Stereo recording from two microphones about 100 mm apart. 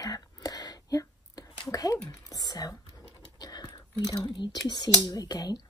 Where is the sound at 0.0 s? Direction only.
40° left (ahead or behind).